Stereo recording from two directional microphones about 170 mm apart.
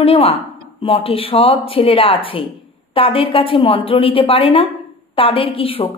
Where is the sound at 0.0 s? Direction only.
35° left (ahead or behind).